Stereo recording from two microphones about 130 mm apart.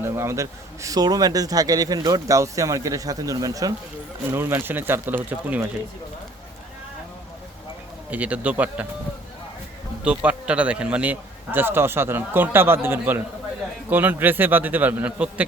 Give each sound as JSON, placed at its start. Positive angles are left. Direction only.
{"t": 0.0, "sound": "a man's voice", "side_deg": -20}
{"t": 8.1, "sound": "a man's voice", "side_deg": -10}
{"t": 10.0, "sound": "a man's voice", "side_deg": -10}